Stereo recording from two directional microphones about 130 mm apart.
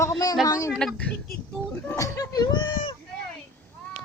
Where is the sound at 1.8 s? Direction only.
20° left (ahead or behind); by 2.9 s 40° left (ahead or behind).